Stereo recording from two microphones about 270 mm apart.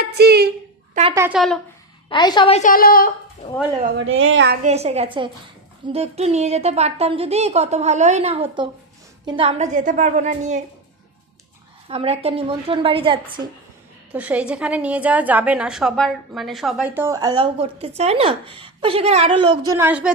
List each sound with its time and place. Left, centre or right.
0.0 s a sound: right
1.1 s speech: centre
2.0 s a woman's voice: centre; by 3.1 s left
4.2 s a woman's voice: right
4.6 s a woman's voice: right
11.9 s a woman's voice: right
14.1 s a woman's voice: centre